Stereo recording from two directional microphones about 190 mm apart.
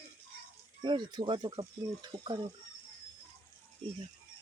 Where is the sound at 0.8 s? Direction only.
25° right (ahead or behind).